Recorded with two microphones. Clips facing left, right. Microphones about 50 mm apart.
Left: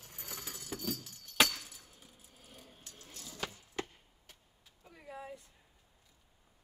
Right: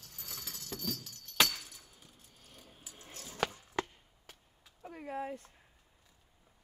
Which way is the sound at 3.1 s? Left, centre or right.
Right.